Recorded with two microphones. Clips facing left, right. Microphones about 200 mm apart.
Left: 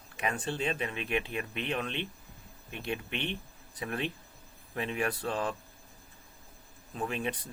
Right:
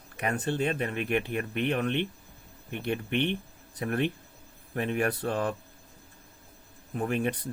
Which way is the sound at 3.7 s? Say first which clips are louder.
Right 6 dB; 55° right (ahead or behind).